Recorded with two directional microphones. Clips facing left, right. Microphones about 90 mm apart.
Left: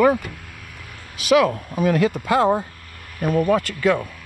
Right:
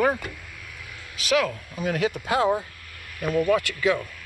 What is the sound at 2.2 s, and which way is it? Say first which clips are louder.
Speech: left 4 dB; 50° left (ahead or behind).